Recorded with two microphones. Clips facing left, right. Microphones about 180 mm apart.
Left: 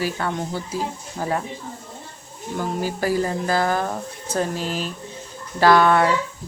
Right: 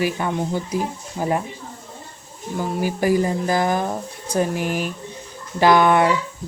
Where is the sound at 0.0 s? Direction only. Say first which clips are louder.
Right 3 dB; 15° right (ahead or behind).